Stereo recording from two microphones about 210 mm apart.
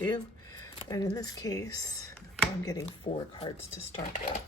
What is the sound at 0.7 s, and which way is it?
Speech, 20° left (ahead or behind).